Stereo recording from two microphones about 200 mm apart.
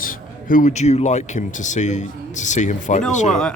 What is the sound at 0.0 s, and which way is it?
Speech, 40° left (ahead or behind).